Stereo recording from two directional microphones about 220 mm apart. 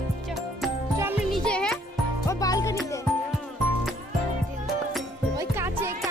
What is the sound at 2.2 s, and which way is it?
Music, 15° left (ahead or behind).